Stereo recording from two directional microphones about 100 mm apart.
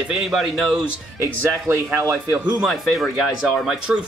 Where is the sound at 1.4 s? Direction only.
25° right (ahead or behind).